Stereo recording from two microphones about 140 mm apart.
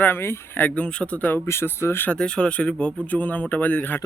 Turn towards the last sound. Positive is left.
turn(degrees=10)  # may be behind; listen again after turning